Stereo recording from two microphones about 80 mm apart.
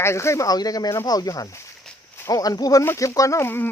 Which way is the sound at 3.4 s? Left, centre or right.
Left.